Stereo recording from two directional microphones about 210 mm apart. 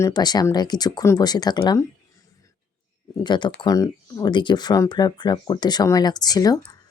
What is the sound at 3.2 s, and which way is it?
Speech, 20° left (ahead or behind).